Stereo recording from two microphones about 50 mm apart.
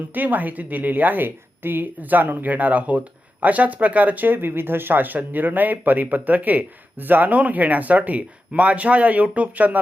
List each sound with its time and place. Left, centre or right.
0.1 s a woman's voice: right
7.3 s a woman's voice: right